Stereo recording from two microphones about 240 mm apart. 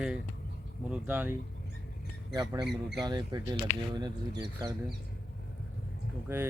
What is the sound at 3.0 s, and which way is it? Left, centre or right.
Speech, centre.